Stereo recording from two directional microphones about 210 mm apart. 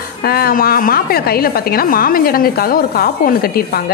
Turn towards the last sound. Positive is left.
turn(degrees=45)  # may be behind; listen again after turning